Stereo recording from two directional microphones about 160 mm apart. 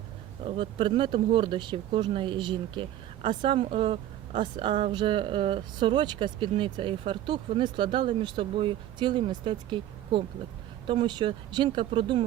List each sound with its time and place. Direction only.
0.4 s speech: 35° right (ahead or behind)